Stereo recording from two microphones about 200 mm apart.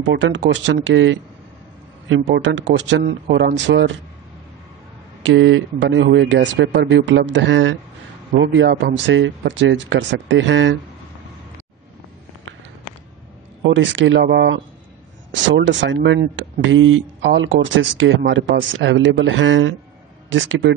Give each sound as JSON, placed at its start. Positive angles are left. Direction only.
{"t": 0.0, "sound": "speech", "side_deg": -60}
{"t": 5.2, "sound": "speech", "side_deg": -70}
{"t": 13.7, "sound": "speech", "side_deg": -65}
{"t": 15.5, "sound": "speech", "side_deg": -70}
{"t": 16.7, "sound": "speech", "side_deg": -75}